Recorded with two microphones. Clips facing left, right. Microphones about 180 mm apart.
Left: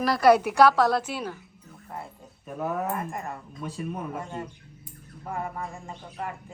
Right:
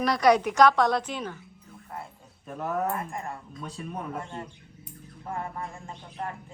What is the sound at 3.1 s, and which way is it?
Speech, 20° left (ahead or behind).